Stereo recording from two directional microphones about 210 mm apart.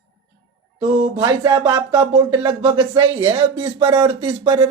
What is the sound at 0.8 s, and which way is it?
Speech, 20° right (ahead or behind).